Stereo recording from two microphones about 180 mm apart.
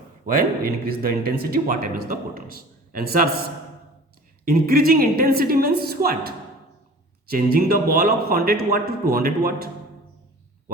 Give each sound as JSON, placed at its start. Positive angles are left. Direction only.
{"t": 0.3, "sound": "speech", "side_deg": -55}
{"t": 4.4, "sound": "a man's voice", "side_deg": -55}